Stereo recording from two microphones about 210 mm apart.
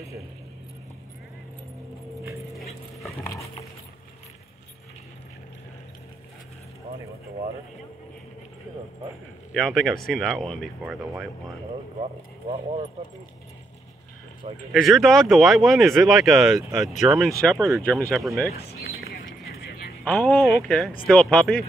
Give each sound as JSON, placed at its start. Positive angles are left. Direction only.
{"t": 2.5, "sound": "dog", "side_deg": 0}
{"t": 3.2, "sound": "dog", "side_deg": 15}
{"t": 9.5, "sound": "speech", "side_deg": 0}
{"t": 12.0, "sound": "speech", "side_deg": -30}
{"t": 14.4, "sound": "speech", "side_deg": -25}
{"t": 14.8, "sound": "speech", "side_deg": 0}
{"t": 18.8, "sound": "whispering", "side_deg": 45}
{"t": 20.1, "sound": "speech", "side_deg": 5}